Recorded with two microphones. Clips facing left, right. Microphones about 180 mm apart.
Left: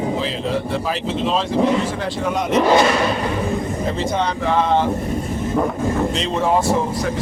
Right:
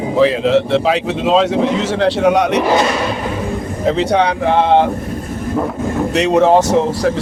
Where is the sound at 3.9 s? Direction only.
75° right (ahead or behind).